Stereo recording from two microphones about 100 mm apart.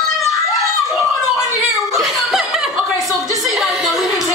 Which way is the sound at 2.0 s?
5° right (ahead or behind).